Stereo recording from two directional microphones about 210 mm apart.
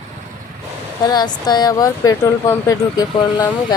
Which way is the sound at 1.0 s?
20° left (ahead or behind).